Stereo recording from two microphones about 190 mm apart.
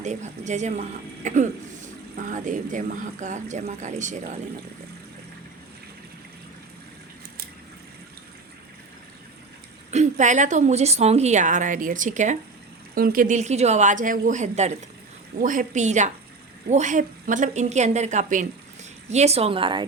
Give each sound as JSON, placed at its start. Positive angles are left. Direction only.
{"t": 0.0, "sound": "a woman's voice", "side_deg": -40}
{"t": 9.9, "sound": "a woman's voice", "side_deg": -40}